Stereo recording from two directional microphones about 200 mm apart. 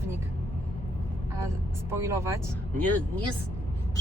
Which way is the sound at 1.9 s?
15° right (ahead or behind).